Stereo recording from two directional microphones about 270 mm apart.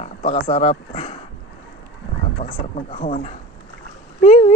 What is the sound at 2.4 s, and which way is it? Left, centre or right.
Speech, left.